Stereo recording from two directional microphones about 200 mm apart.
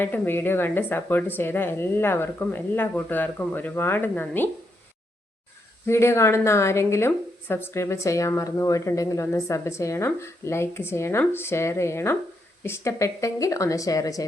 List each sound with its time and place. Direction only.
0.0 s a woman's voice: 10° left (ahead or behind)
5.8 s a woman's voice: 15° left (ahead or behind)